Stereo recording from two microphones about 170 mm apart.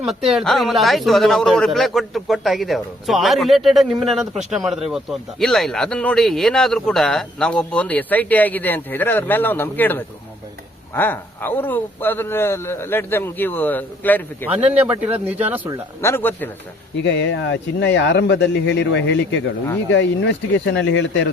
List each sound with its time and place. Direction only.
0.0 s speech: centre (ahead or behind)
14.5 s speech: 10° right (ahead or behind)
16.0 s speech: 15° left (ahead or behind)
17.0 s speech: 90° left